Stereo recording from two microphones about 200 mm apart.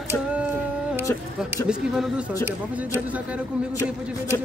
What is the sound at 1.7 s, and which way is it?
Speech, 5° right (ahead or behind).